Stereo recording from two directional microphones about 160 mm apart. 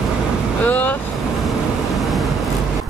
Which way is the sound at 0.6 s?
10° left (ahead or behind).